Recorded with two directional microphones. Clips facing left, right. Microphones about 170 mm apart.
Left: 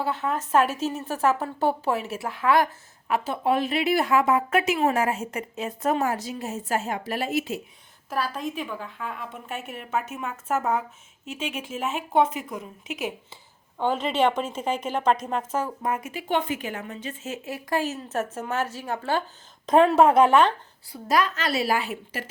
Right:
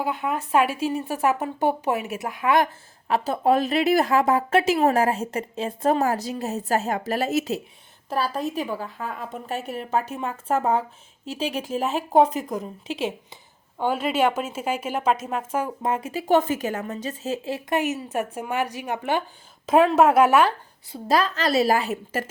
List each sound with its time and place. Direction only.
0.0 s speech: 10° right (ahead or behind)
3.1 s speech: 40° right (ahead or behind)
13.7 s speech: 10° right (ahead or behind)
15.8 s speech: 25° right (ahead or behind)
19.6 s speech: 5° right (ahead or behind)
20.9 s speech: 30° right (ahead or behind)